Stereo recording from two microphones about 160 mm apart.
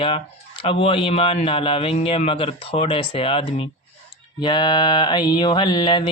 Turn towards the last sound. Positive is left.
turn(degrees=30)  # may be behind; listen again after turning